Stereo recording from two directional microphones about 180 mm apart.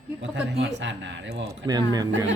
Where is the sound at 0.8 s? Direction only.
90° right; by 1.5 s 75° right (ahead or behind).